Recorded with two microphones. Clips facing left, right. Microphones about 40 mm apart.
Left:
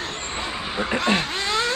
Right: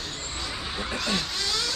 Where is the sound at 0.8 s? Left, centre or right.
Left.